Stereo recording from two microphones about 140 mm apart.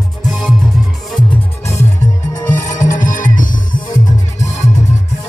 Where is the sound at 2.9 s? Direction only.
70° left (ahead or behind).